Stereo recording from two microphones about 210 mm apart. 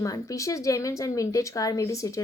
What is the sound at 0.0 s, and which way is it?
A woman's voice, 15° left (ahead or behind).